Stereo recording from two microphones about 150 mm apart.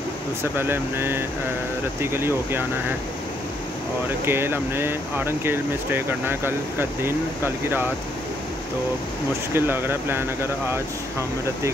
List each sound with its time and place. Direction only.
0.4 s speech: 15° right (ahead or behind)
4.3 s speech: 15° right (ahead or behind)
9.5 s speech: 15° right (ahead or behind)